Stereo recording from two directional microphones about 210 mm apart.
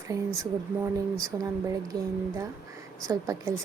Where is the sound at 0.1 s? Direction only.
15° right (ahead or behind).